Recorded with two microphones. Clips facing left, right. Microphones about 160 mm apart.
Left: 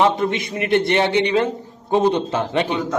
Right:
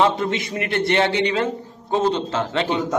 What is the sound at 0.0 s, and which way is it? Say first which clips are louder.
A man's voice: left 1 dB; 20° left (ahead or behind).